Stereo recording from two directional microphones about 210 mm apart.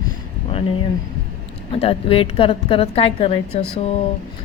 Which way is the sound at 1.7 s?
25° left (ahead or behind).